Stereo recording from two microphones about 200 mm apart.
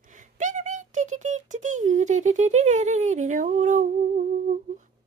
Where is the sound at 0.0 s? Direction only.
40° right (ahead or behind).